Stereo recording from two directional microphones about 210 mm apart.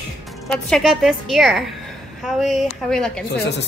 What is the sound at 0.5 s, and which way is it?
A woman's voice, centre (ahead or behind).